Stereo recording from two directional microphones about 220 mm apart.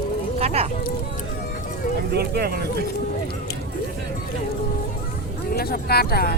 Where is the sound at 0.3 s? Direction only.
30° right (ahead or behind).